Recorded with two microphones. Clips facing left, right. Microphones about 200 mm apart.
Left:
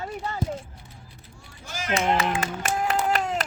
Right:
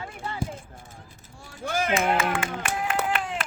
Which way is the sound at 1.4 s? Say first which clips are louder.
Right 8 dB; 55° right (ahead or behind).